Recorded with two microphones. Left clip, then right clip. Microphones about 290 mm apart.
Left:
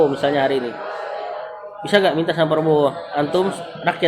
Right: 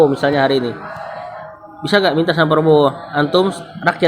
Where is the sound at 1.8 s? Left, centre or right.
Right.